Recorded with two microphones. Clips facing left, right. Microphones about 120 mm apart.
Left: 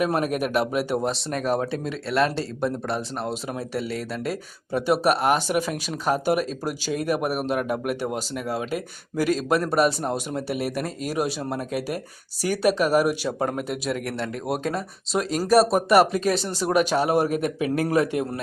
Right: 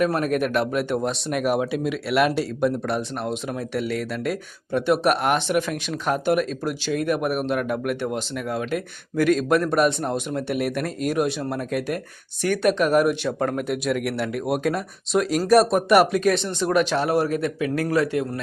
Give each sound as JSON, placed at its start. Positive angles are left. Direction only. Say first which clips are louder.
{"t": 0.0, "sound": "speech", "louder": "right 2 dB", "side_deg": 10}
{"t": 1.3, "sound": "speech", "louder": "right 4 dB", "side_deg": -10}